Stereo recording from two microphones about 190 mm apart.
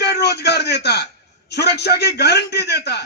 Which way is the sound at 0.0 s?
60° left (ahead or behind).